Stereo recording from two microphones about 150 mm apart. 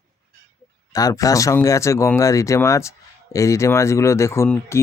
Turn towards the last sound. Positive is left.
turn(degrees=20)  # may be behind; listen again after turning